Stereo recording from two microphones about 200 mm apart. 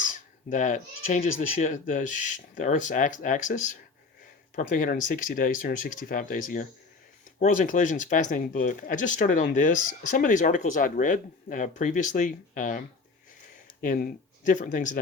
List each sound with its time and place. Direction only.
0.0 s speech: 40° left (ahead or behind)
13.8 s speech: 40° left (ahead or behind)